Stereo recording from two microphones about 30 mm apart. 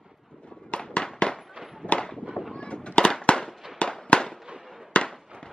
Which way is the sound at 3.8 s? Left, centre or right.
Left.